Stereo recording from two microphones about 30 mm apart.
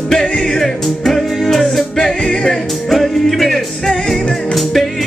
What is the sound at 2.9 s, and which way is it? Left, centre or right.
Music, centre.